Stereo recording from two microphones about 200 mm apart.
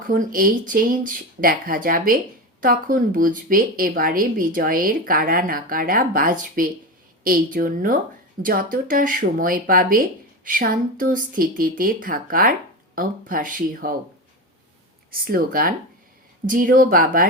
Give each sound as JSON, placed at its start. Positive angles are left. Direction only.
{"t": 0.1, "sound": "speech", "side_deg": -45}
{"t": 15.1, "sound": "speech", "side_deg": -50}